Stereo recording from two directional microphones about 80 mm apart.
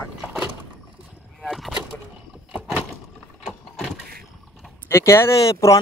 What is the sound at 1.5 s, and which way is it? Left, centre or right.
Boat, centre.